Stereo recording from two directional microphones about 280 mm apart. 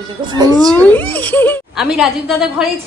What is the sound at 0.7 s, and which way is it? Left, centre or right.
A woman's voice, centre.